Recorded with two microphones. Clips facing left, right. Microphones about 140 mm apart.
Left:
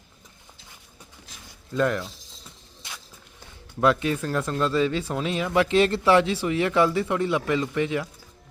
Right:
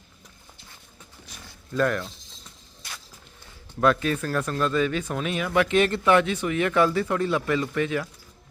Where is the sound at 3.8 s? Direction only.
20° left (ahead or behind).